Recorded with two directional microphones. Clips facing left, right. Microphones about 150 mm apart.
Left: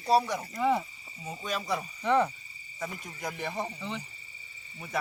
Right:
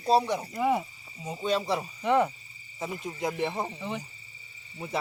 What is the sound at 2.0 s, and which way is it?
Speech, 15° right (ahead or behind).